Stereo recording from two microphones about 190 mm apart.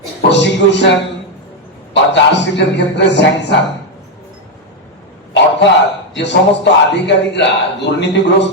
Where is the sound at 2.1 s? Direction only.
65° left (ahead or behind).